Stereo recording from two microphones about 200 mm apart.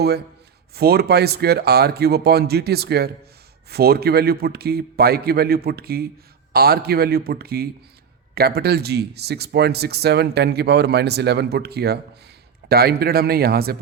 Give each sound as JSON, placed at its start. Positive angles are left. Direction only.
{"t": 0.8, "sound": "speech", "side_deg": -50}